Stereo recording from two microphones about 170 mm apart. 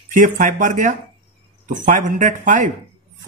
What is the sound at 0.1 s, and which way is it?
A man's voice, 50° right (ahead or behind).